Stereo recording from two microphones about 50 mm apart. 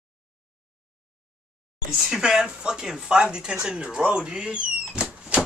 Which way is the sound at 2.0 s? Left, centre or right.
Centre.